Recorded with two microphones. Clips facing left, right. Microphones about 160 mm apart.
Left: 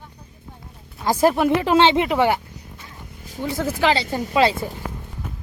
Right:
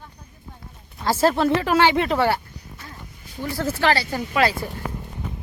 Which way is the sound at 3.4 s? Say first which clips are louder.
Left 1 dB; 15° left (ahead or behind).